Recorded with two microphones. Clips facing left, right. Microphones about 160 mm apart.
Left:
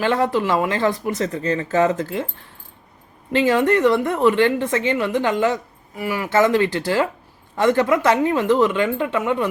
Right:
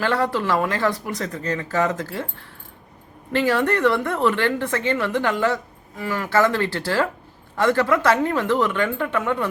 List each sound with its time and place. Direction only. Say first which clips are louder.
0.0 s speech: left 3 dB; 20° left (ahead or behind)
3.3 s a woman's voice: left 3 dB; 15° left (ahead or behind)